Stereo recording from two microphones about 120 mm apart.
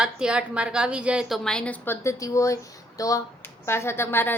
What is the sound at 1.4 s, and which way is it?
A woman's voice, 5° left (ahead or behind).